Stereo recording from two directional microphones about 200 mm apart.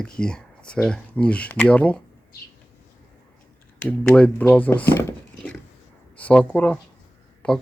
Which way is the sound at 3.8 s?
5° left (ahead or behind).